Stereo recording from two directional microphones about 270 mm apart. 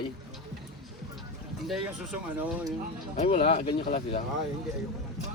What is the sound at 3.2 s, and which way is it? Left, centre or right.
A man's voice, left.